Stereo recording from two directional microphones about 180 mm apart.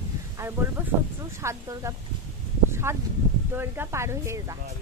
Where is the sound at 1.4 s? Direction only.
15° right (ahead or behind).